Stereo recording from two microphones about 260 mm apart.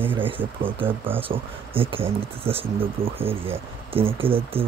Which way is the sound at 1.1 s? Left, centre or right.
Right.